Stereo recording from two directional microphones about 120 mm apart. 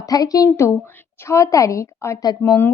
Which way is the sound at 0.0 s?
30° left (ahead or behind).